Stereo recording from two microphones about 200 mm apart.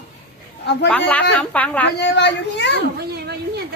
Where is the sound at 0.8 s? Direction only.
5° left (ahead or behind).